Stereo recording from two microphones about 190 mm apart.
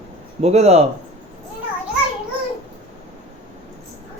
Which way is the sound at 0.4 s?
35° right (ahead or behind).